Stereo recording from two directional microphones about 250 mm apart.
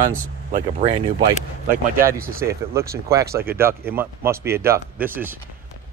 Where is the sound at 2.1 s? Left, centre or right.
Right.